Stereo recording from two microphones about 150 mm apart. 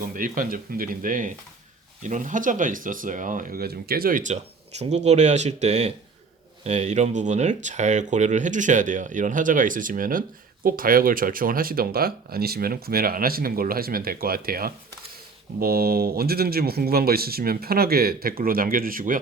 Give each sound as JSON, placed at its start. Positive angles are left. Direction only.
{"t": 0.0, "sound": "speech", "side_deg": -65}